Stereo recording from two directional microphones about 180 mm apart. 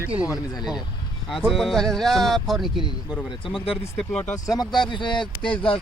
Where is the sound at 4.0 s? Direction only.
5° left (ahead or behind).